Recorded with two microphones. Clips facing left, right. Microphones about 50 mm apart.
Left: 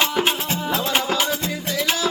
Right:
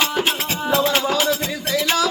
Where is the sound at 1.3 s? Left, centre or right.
Right.